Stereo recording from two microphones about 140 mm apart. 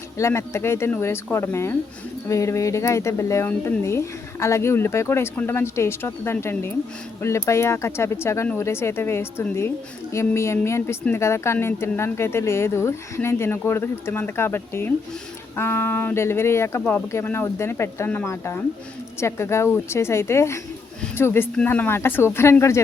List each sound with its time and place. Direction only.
0.2 s speech: 20° left (ahead or behind)